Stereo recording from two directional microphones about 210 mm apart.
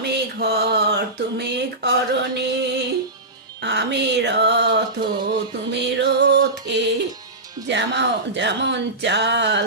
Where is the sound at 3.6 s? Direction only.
55° right (ahead or behind).